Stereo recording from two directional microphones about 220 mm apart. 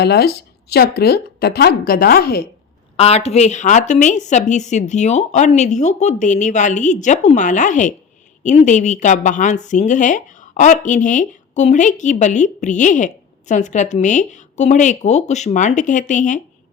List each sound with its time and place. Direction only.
0.0 s speech: 45° left (ahead or behind)
3.0 s a woman's voice: 30° left (ahead or behind)